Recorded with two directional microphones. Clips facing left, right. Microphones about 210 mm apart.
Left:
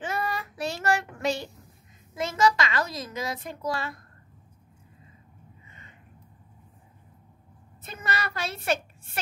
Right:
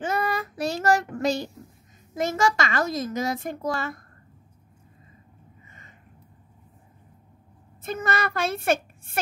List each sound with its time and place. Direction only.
0.0 s child singing: 40° right (ahead or behind)
2.1 s a child's voice: 45° right (ahead or behind)
5.7 s a sound: 45° right (ahead or behind)
7.8 s a woman's voice: 50° right (ahead or behind)